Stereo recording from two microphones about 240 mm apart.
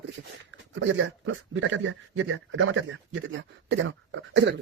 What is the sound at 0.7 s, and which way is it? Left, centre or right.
Speech, right.